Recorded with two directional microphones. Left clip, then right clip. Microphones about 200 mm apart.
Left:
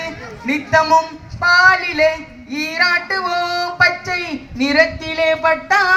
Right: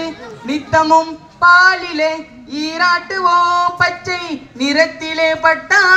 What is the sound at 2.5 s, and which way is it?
Child singing, 20° left (ahead or behind).